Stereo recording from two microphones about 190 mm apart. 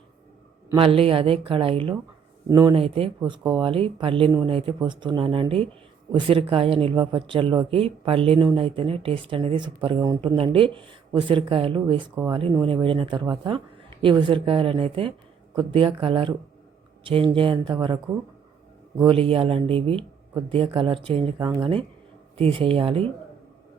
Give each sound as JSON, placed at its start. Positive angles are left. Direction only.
{"t": 0.8, "sound": "a woman's voice", "side_deg": -30}
{"t": 19.0, "sound": "a woman's voice", "side_deg": -30}
{"t": 21.3, "sound": "speech", "side_deg": -15}
{"t": 22.4, "sound": "a woman's voice", "side_deg": -30}